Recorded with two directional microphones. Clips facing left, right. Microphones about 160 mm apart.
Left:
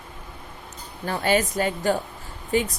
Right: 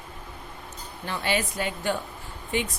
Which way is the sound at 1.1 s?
45° left (ahead or behind).